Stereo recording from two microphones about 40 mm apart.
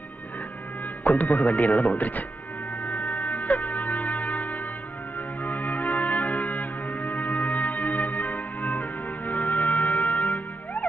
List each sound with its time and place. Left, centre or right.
1.0 s speech: left
3.0 s music: left